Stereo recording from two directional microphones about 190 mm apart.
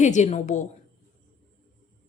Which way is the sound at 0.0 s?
40° left (ahead or behind).